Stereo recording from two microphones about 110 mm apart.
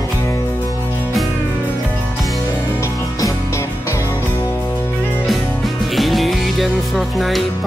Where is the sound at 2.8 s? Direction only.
30° left (ahead or behind).